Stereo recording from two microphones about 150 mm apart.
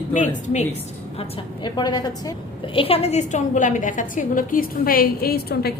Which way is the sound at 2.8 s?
40° left (ahead or behind).